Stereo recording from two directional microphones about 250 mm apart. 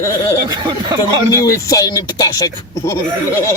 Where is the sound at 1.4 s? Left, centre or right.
Centre.